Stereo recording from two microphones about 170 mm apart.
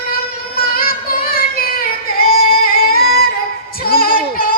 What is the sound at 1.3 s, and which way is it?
Child singing, 60° left (ahead or behind).